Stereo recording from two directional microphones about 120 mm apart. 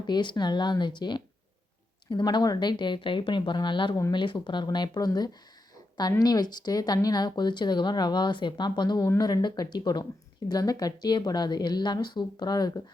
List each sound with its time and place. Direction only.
0.0 s speech: 40° left (ahead or behind)